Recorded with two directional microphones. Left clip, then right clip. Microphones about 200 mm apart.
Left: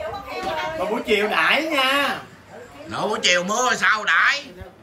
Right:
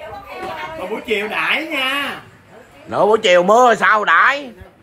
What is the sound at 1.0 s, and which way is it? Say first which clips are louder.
Speech: even; 10° left (ahead or behind).